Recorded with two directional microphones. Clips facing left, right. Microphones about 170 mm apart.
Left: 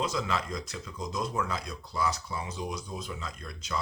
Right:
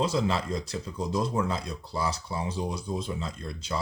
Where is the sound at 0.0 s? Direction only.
30° right (ahead or behind).